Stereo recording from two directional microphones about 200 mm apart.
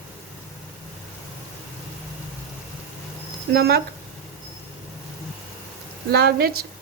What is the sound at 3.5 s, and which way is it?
Speech, 55° right (ahead or behind).